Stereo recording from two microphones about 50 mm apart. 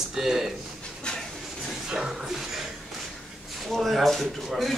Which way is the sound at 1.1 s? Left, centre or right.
Centre.